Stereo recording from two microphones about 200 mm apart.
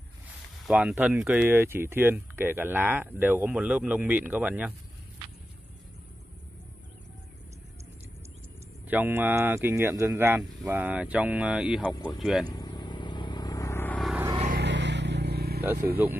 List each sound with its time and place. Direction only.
0.7 s speech: 5° right (ahead or behind)
8.8 s speech: 10° right (ahead or behind)
12.4 s vehicle: 20° left (ahead or behind)
14.6 s vehicle: 60° right (ahead or behind)
15.6 s speech: 10° right (ahead or behind)